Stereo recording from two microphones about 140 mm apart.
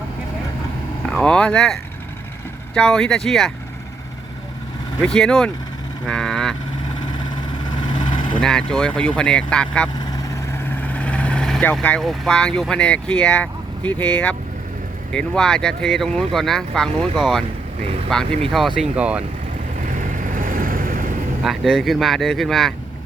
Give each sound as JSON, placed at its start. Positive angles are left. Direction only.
{"t": 1.1, "sound": "speech", "side_deg": 5}
{"t": 5.0, "sound": "speech", "side_deg": 5}
{"t": 7.8, "sound": "vehicle", "side_deg": 35}
{"t": 8.4, "sound": "speech", "side_deg": 5}
{"t": 10.0, "sound": "vehicle", "side_deg": 25}
{"t": 15.1, "sound": "speech", "side_deg": 5}
{"t": 19.8, "sound": "vehicle", "side_deg": -70}
{"t": 21.4, "sound": "speech", "side_deg": 0}